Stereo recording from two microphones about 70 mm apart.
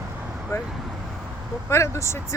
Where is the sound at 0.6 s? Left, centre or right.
Centre.